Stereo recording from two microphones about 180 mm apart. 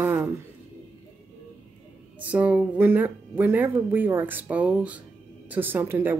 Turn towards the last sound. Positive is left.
turn(degrees=-10)  # may be behind; listen again after turning